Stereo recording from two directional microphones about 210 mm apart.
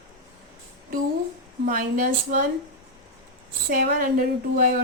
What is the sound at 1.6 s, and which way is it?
Speech, 40° right (ahead or behind).